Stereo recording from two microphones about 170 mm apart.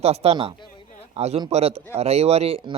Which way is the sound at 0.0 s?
35° right (ahead or behind).